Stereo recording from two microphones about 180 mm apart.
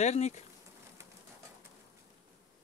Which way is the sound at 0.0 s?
40° left (ahead or behind).